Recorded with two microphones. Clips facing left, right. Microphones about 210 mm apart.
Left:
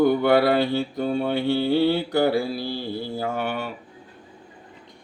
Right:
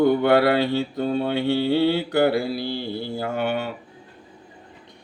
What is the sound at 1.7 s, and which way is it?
Mantra, 65° right (ahead or behind).